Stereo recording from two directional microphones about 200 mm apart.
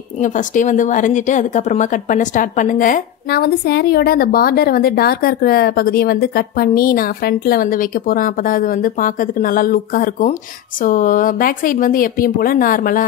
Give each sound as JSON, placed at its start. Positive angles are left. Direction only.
{"t": 0.2, "sound": "a woman's voice", "side_deg": 40}